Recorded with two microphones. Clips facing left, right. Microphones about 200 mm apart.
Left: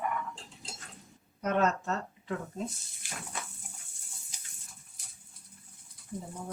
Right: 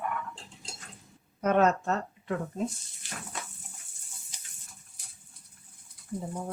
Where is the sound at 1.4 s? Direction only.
55° right (ahead or behind).